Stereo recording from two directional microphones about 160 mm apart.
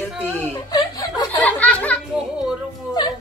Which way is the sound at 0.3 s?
10° left (ahead or behind).